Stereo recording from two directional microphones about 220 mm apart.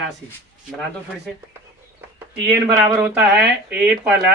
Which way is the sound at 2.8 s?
5° right (ahead or behind).